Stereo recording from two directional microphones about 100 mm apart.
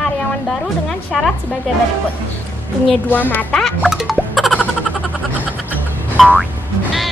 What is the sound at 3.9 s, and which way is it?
Music, 5° right (ahead or behind).